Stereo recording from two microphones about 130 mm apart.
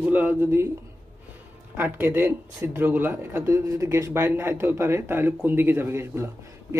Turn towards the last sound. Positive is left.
turn(degrees=-20)  # may be behind; listen again after turning